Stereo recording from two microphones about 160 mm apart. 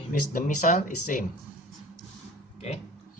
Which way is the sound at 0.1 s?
55° left (ahead or behind).